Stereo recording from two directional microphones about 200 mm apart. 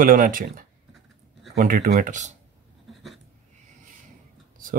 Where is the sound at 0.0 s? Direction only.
45° right (ahead or behind).